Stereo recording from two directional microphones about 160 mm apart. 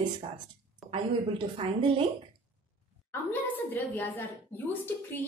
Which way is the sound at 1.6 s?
30° right (ahead or behind).